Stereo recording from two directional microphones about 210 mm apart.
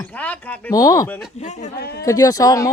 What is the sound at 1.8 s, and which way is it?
Speech, 50° left (ahead or behind).